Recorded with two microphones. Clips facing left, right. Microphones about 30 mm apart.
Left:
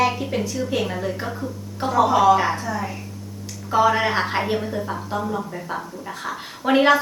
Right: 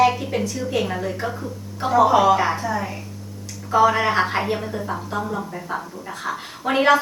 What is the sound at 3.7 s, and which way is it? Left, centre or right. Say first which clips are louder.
A woman's voice: right 1 dB; centre.